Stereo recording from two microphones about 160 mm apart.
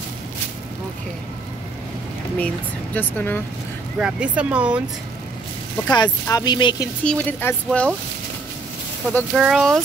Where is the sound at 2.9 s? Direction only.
10° left (ahead or behind).